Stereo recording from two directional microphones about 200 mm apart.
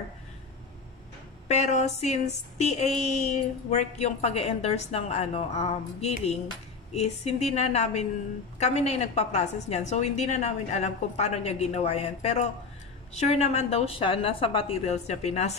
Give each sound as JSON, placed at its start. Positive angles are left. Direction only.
{"t": 1.5, "sound": "a woman's voice", "side_deg": 35}